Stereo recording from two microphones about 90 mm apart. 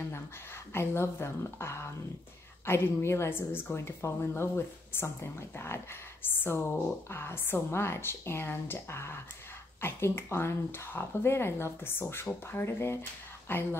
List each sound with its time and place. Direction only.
0.7 s speech: 30° left (ahead or behind)